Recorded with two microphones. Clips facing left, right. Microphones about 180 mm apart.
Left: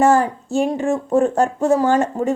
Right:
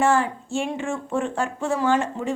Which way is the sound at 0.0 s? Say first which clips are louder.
Left 5 dB; 40° left (ahead or behind).